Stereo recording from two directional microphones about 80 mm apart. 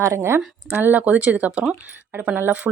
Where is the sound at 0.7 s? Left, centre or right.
Right.